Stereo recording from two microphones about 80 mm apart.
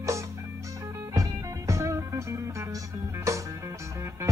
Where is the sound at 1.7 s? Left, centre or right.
Right.